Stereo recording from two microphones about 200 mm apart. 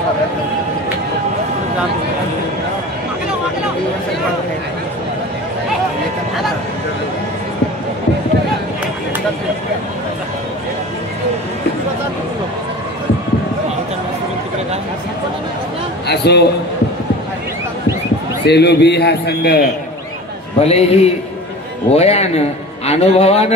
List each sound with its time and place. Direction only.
16.1 s a man's voice: 55° left (ahead or behind)
18.4 s a man's voice: 55° left (ahead or behind)
20.6 s a man's voice: 30° left (ahead or behind)